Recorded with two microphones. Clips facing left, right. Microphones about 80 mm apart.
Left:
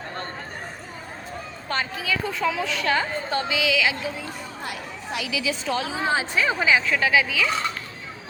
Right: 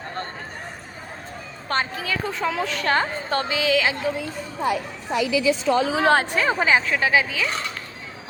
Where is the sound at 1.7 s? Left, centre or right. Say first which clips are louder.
Right 2 dB; right.